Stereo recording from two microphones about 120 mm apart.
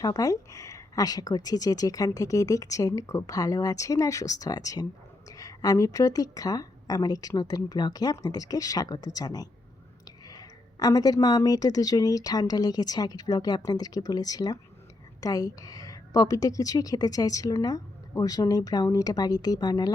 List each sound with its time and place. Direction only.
0.0 s a woman's voice: 30° left (ahead or behind)